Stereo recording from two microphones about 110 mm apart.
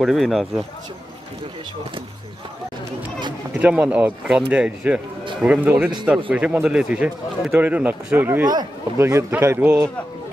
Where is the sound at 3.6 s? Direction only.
15° right (ahead or behind).